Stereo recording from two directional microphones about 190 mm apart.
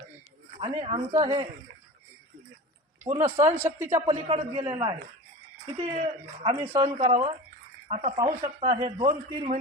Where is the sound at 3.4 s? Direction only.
15° right (ahead or behind).